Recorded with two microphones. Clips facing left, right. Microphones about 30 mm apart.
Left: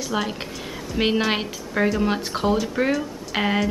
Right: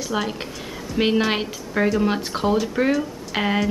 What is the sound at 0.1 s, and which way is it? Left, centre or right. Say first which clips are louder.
A woman's voice: right 1 dB; centre.